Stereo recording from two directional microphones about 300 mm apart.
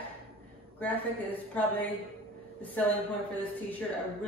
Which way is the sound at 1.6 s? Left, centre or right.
Centre.